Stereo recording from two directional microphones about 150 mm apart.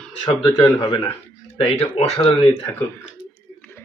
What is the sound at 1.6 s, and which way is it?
Speech, 45° left (ahead or behind).